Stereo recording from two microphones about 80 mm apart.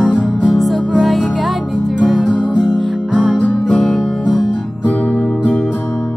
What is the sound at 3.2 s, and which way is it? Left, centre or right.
Music, centre.